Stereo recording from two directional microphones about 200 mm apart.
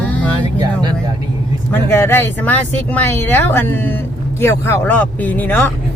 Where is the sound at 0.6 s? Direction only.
20° right (ahead or behind).